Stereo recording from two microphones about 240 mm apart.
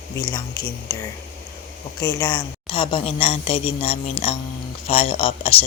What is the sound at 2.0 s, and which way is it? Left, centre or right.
A woman's voice, centre.